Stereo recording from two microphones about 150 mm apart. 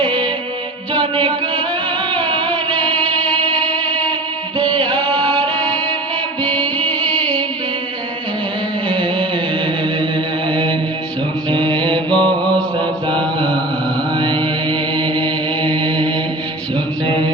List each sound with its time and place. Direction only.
0.0 s music: 30° right (ahead or behind)
2.7 s music: 10° left (ahead or behind)
4.5 s music: 30° right (ahead or behind)
5.5 s music: 10° left (ahead or behind)
8.9 s music: 30° right (ahead or behind)
10.5 s mantra: 30° right (ahead or behind)